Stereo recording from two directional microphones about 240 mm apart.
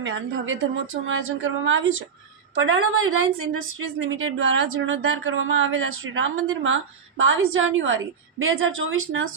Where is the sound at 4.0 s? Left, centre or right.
Right.